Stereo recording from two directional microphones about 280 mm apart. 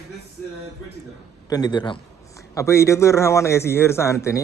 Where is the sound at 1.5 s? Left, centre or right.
Centre.